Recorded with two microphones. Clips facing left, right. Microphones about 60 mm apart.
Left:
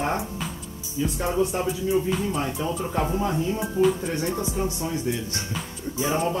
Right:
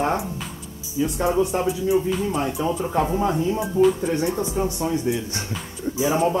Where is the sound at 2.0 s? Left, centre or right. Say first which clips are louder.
Right 2 dB; centre.